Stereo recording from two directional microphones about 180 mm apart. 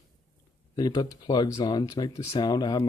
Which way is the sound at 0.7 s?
20° left (ahead or behind).